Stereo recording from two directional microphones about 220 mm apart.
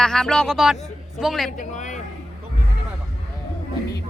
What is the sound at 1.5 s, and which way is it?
Speech, 35° left (ahead or behind).